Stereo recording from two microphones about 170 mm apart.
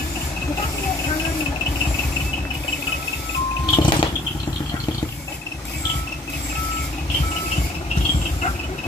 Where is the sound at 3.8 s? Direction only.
30° left (ahead or behind).